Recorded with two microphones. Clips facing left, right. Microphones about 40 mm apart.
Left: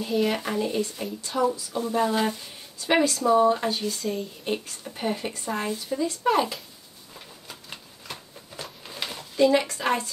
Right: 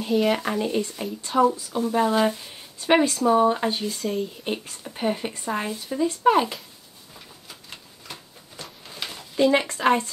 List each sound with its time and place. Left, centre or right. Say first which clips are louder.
0.0 s speech: right 3 dB; centre
0.4 s speech: right 2 dB; centre
2.8 s speech: right 3 dB; right
4.0 s speech: right 3 dB; centre
4.5 s speech: even; centre
7.2 s a sound: left 2 dB; centre
9.4 s speech: right 1 dB; right